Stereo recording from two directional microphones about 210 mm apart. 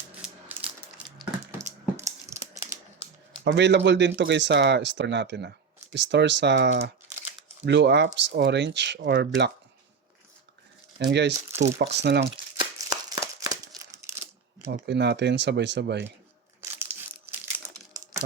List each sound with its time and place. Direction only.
0.2 s mechanisms: 5° right (ahead or behind)
1.5 s a sound: 15° right (ahead or behind)
3.4 s speech: 55° right (ahead or behind)
10.9 s speech: 55° right (ahead or behind)
12.9 s crumpling: 20° right (ahead or behind)
14.7 s speech: 55° right (ahead or behind)
16.6 s crushing: 10° right (ahead or behind)